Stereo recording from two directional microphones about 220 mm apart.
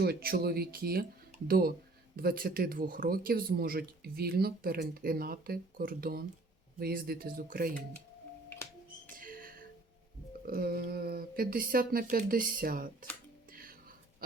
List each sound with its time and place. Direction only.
0.0 s speech: 45° right (ahead or behind)
9.1 s music: 40° right (ahead or behind)
10.4 s speech: 45° right (ahead or behind)
13.5 s music: 40° right (ahead or behind)